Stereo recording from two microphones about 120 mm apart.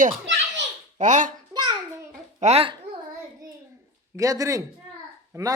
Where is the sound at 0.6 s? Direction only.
80° right.